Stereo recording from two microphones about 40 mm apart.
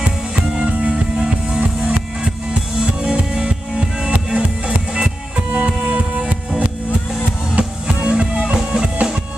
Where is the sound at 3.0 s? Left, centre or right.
Centre.